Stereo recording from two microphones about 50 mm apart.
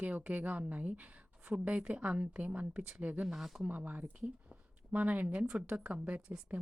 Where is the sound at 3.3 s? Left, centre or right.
Centre.